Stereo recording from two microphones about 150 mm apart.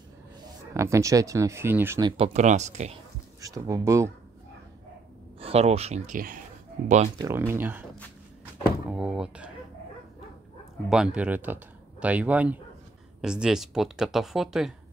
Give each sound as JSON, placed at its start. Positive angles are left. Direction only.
{"t": 0.7, "sound": "speech", "side_deg": -20}
{"t": 2.0, "sound": "speech", "side_deg": -30}
{"t": 2.2, "sound": "speech", "side_deg": -50}
{"t": 3.3, "sound": "speech", "side_deg": -25}
{"t": 5.4, "sound": "speech", "side_deg": -45}
{"t": 7.2, "sound": "speech", "side_deg": -15}
{"t": 8.8, "sound": "door", "side_deg": -5}
{"t": 10.9, "sound": "speech", "side_deg": -5}